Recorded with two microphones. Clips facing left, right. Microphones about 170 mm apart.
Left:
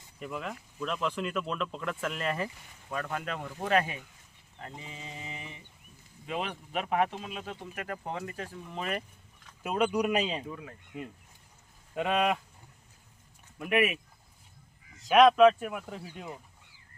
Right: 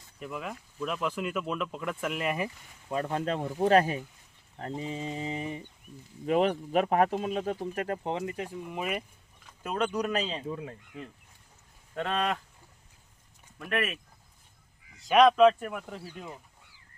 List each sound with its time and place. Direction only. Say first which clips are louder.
0.2 s speech: even; centre (ahead or behind)
2.9 s speech: right 5 dB; 25° right (ahead or behind); by 9.0 s 10° right (ahead or behind)
9.6 s speech: left 2 dB; 10° left (ahead or behind)
10.5 s speech: right 5 dB; 25° right (ahead or behind)
11.9 s speech: left 2 dB; 10° left (ahead or behind)
13.6 s speech: left 4 dB; 10° left (ahead or behind)
15.0 s speech: even; centre (ahead or behind)